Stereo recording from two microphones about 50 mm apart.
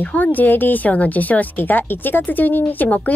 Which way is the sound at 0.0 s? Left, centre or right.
Left.